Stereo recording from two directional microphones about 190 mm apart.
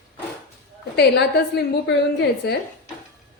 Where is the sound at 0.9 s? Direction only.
60° left (ahead or behind).